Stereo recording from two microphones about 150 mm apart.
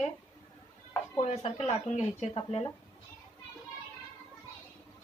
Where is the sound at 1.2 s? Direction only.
45° left (ahead or behind).